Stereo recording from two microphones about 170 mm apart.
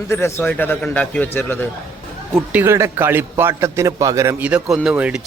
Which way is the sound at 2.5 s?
15° right (ahead or behind).